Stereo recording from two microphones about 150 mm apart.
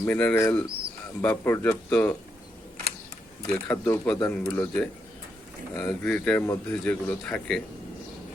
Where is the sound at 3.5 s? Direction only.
10° left (ahead or behind).